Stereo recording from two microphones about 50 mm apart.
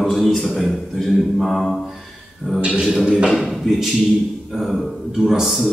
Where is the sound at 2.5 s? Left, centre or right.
Centre.